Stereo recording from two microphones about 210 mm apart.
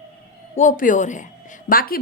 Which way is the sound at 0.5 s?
40° left (ahead or behind).